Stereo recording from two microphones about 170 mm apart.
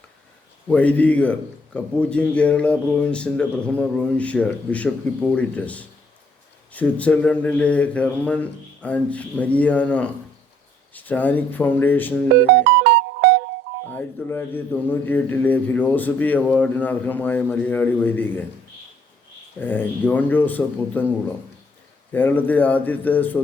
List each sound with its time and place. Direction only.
0.7 s a man's voice: 10° left (ahead or behind)
12.6 s music: 80° right
13.9 s a man's voice: 10° left (ahead or behind)
19.5 s a man's voice: 10° left (ahead or behind)
22.1 s a man's voice: 10° left (ahead or behind)